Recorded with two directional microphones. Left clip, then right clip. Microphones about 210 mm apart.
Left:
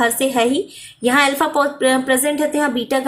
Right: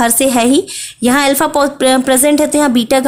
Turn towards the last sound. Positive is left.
turn(degrees=-55)  # may be behind; listen again after turning